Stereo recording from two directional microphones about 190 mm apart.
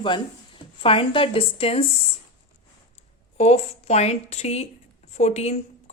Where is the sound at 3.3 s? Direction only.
35° left (ahead or behind).